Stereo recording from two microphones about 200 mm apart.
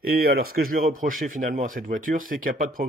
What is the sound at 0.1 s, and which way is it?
Speech, 50° right (ahead or behind).